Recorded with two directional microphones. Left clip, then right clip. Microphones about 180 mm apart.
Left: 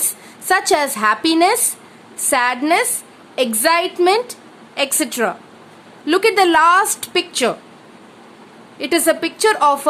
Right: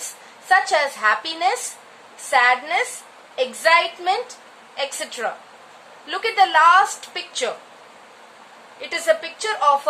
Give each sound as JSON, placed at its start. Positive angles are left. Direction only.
{"t": 0.0, "sound": "a woman's voice", "side_deg": 65}
{"t": 8.7, "sound": "a woman's voice", "side_deg": 60}